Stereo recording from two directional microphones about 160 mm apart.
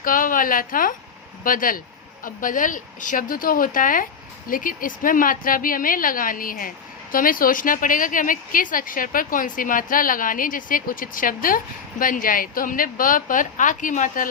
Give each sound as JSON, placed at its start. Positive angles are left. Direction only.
{"t": 0.0, "sound": "a woman's voice", "side_deg": 60}